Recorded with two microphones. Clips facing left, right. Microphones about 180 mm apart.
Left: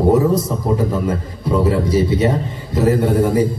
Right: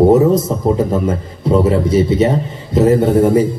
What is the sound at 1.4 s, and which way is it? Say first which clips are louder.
A man's voice: right 4 dB; 25° right (ahead or behind).